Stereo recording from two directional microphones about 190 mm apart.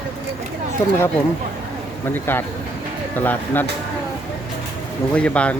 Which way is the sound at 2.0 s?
10° left (ahead or behind).